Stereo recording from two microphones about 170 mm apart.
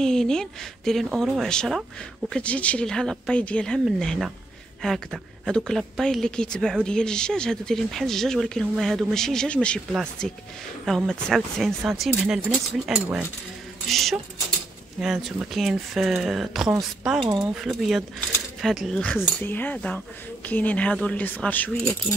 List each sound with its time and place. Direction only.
0.0 s speech: 5° left (ahead or behind)
17.2 s speech: 20° right (ahead or behind)
17.6 s speech: centre (ahead or behind)